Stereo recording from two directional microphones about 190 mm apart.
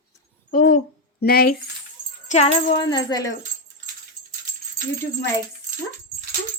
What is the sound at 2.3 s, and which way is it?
Music, 40° left (ahead or behind).